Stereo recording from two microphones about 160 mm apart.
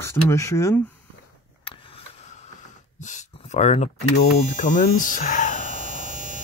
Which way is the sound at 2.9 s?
50° left (ahead or behind).